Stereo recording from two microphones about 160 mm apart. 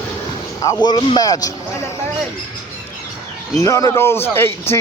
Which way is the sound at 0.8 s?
25° left (ahead or behind).